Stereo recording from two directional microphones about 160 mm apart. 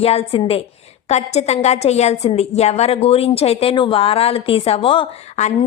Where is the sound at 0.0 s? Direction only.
40° left (ahead or behind).